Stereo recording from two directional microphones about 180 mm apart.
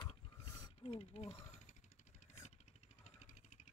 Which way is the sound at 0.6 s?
30° left (ahead or behind).